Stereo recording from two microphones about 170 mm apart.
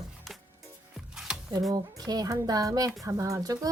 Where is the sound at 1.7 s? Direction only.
25° right (ahead or behind).